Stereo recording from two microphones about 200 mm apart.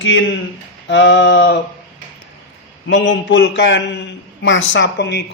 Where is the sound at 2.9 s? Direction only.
65° left (ahead or behind).